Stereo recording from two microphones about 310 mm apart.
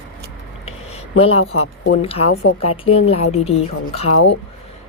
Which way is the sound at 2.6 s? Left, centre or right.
Centre.